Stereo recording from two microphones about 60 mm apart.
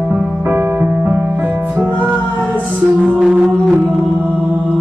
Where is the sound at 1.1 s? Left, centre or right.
Right.